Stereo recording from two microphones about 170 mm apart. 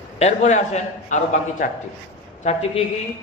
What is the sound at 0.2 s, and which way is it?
A man's voice, 40° left (ahead or behind).